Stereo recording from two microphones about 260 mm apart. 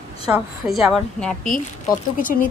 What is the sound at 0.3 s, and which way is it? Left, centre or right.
A woman's voice, centre.